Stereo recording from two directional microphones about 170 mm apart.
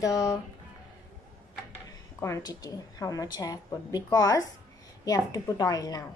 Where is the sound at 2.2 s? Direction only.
20° left (ahead or behind).